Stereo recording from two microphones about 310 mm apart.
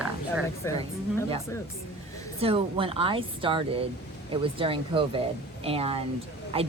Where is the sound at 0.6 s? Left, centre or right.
Centre.